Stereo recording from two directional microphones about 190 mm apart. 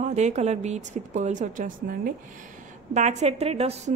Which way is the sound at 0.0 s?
35° right (ahead or behind).